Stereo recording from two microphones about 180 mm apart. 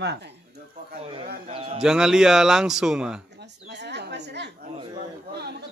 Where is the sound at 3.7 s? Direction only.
70° right (ahead or behind).